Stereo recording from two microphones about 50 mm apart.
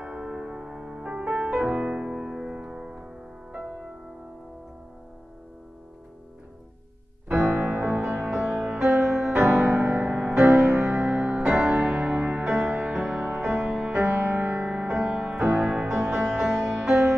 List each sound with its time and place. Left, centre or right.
0.0 s music: right
7.2 s music: centre
7.6 s music: right
8.3 s music: centre
9.8 s music: right
10.3 s music: centre
11.8 s music: right
12.4 s music: centre